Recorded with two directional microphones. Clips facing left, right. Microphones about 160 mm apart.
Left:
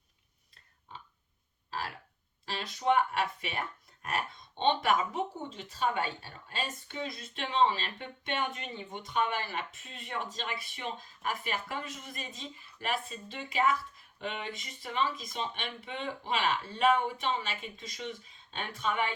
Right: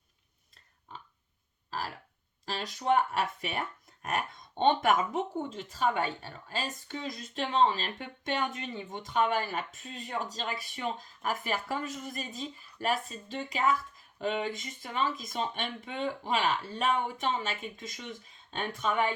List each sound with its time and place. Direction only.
2.5 s speech: 40° right (ahead or behind)